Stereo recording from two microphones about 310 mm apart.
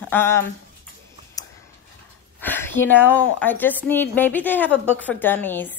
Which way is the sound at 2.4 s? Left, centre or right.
Centre.